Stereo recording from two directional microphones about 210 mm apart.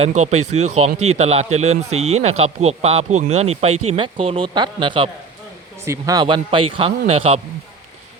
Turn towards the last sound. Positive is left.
turn(degrees=-25)  # may be behind; listen again after turning